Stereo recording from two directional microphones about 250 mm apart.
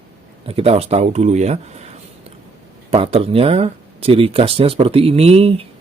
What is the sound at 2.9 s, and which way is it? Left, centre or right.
A man's voice, right.